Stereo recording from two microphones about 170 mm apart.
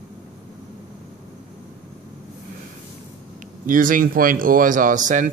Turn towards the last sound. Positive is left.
turn(degrees=-50)  # may be behind; listen again after turning